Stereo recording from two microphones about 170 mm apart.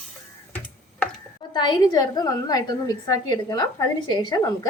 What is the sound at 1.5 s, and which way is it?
A woman's voice, 25° left (ahead or behind).